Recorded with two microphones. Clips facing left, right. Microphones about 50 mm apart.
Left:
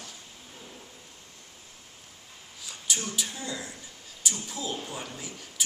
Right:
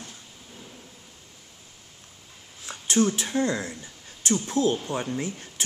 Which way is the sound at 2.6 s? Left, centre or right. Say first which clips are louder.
Right 11 dB; right.